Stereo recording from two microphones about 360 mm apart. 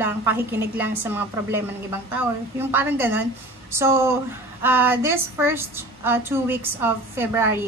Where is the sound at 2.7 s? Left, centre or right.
Centre.